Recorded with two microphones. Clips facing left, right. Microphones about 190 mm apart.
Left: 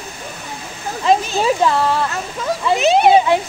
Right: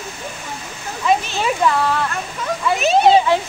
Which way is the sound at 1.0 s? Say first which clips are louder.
Left 3 dB; 35° left (ahead or behind).